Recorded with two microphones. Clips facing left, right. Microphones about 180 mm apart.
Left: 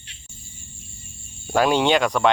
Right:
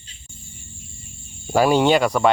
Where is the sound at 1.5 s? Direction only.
10° right (ahead or behind).